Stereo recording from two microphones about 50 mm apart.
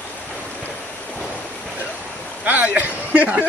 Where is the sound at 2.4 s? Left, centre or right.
Right.